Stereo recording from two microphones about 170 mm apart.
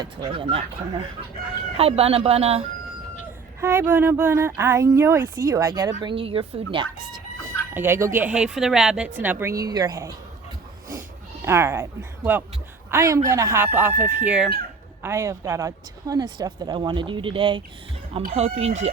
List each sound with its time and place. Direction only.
0.0 s speech: 30° right (ahead or behind)
3.6 s speech: 15° right (ahead or behind); by 6.8 s 30° right (ahead or behind)
7.7 s speech: 15° right (ahead or behind)
11.4 s speech: 15° right (ahead or behind)
15.0 s speech: 15° right (ahead or behind); by 18.9 s 40° right (ahead or behind)